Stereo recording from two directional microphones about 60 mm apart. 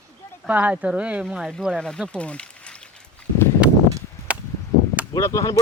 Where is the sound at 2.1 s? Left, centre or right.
Centre.